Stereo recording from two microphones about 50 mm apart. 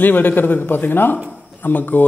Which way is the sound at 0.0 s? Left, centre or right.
Left.